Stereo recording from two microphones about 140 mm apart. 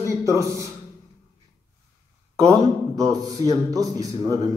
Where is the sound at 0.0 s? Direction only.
20° right (ahead or behind).